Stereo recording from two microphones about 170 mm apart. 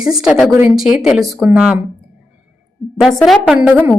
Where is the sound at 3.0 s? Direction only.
Centre (ahead or behind).